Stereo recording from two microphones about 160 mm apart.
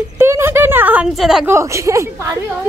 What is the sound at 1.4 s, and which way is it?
Speech, 15° right (ahead or behind).